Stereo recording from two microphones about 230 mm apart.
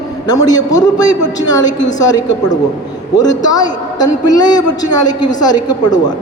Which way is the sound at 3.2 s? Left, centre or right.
Centre.